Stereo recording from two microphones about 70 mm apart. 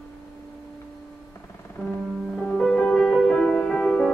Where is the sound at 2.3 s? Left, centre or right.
Centre.